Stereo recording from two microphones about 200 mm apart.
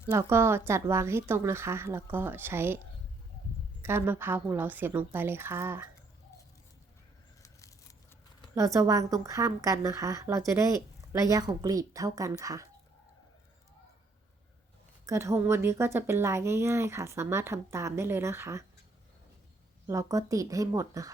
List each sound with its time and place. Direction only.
0.1 s a woman's voice: 15° right (ahead or behind)
3.8 s a woman's voice: 10° right (ahead or behind)
7.4 s a sound: 15° left (ahead or behind)
8.5 s a woman's voice: 15° right (ahead or behind)
15.0 s a woman's voice: 15° right (ahead or behind)
19.9 s a woman's voice: 15° right (ahead or behind)